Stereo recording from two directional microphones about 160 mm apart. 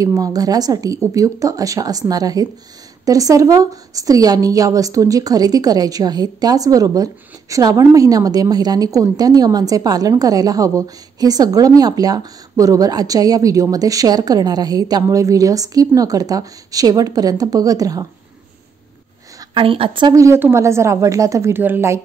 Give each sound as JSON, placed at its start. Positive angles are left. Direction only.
{"t": 0.0, "sound": "a woman's voice", "side_deg": -20}
{"t": 19.5, "sound": "a woman's voice", "side_deg": -35}